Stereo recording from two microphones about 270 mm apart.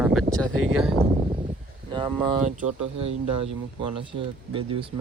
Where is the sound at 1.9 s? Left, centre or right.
Centre.